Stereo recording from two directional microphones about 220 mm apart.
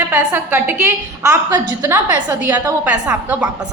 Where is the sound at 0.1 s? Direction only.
10° right (ahead or behind).